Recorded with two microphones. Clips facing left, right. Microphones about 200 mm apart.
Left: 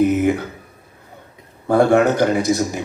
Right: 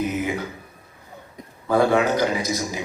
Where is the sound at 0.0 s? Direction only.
55° left (ahead or behind).